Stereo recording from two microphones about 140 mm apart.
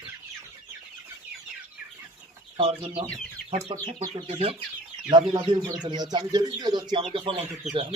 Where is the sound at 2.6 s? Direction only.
45° right (ahead or behind).